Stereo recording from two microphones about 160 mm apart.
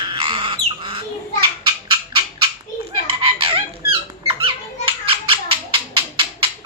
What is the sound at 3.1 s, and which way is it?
Squeak, 35° right (ahead or behind).